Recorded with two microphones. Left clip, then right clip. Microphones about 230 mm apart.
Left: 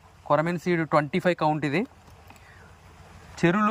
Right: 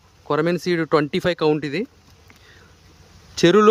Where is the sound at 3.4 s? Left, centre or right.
Right.